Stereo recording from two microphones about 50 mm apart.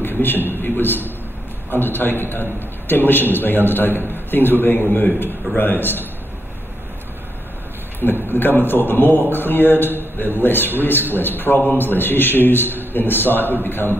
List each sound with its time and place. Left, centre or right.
0.0 s a sound: left
0.5 s a man's voice: left
8.0 s a man's voice: left